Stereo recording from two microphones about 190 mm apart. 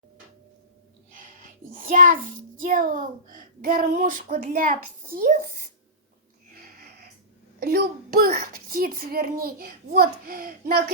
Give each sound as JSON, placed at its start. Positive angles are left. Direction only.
{"t": 1.1, "sound": "child singing", "side_deg": -45}
{"t": 2.6, "sound": "a child's voice", "side_deg": -45}
{"t": 6.5, "sound": "a sound", "side_deg": -50}
{"t": 7.6, "sound": "a child's voice", "side_deg": -55}